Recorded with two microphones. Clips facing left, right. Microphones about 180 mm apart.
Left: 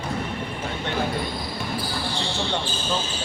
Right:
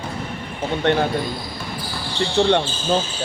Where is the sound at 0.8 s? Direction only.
70° right (ahead or behind).